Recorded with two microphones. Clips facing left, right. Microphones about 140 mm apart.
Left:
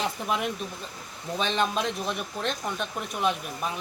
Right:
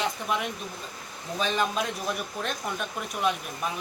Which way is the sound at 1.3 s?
5° right (ahead or behind).